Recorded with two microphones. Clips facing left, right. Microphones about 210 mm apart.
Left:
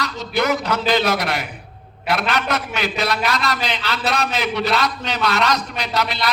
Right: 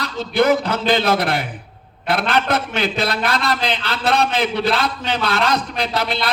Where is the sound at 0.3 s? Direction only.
30° right (ahead or behind).